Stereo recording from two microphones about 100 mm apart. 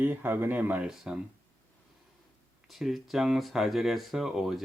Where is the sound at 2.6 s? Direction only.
Centre (ahead or behind).